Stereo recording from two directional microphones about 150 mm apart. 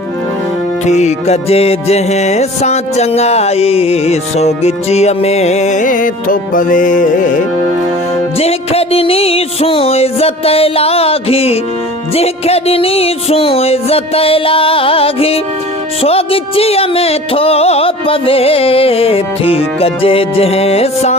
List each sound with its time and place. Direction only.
0.9 s music: 50° left (ahead or behind)
8.4 s music: 40° left (ahead or behind)